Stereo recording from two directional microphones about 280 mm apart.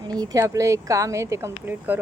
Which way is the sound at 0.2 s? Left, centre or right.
Centre.